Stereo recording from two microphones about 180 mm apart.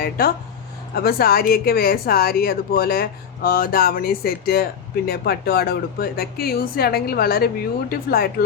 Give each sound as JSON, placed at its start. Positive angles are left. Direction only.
{"t": 0.0, "sound": "speech", "side_deg": 55}